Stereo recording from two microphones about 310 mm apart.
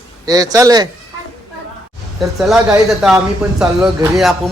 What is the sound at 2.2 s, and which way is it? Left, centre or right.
Speech, centre.